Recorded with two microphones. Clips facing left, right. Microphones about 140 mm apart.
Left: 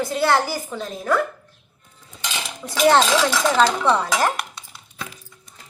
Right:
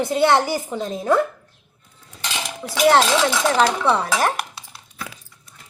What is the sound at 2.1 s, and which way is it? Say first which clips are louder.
Cutlery: right 2 dB; centre (ahead or behind).